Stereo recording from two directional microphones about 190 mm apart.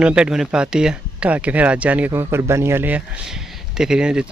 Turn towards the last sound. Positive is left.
turn(degrees=-5)  # may be behind; listen again after turning